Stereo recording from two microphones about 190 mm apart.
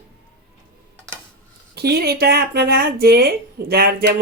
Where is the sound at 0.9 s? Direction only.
5° left (ahead or behind).